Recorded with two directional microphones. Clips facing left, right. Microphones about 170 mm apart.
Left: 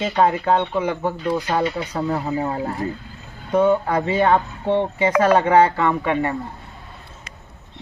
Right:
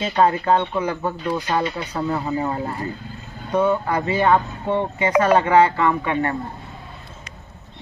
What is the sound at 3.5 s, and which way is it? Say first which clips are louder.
Speech: left 2 dB; 25° left (ahead or behind).